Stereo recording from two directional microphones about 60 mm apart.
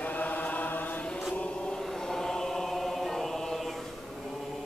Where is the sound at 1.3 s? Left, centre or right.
Centre.